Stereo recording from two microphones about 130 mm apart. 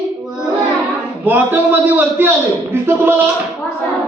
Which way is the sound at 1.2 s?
15° right (ahead or behind).